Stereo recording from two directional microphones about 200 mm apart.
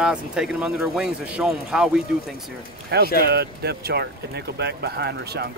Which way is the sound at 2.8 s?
55° right (ahead or behind).